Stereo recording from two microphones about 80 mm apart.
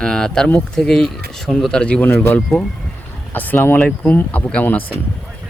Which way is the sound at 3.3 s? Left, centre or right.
Left.